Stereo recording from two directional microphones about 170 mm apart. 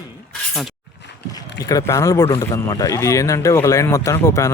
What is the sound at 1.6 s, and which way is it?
Speech, 20° left (ahead or behind).